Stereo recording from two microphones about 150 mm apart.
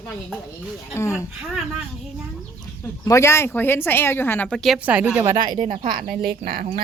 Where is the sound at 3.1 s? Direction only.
20° left (ahead or behind); by 4.8 s 5° left (ahead or behind).